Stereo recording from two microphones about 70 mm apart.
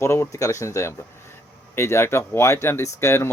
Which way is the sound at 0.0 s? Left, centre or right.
Left.